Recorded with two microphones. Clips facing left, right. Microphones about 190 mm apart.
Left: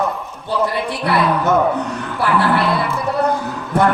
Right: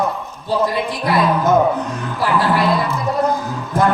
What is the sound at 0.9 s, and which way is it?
Speech, 65° left (ahead or behind).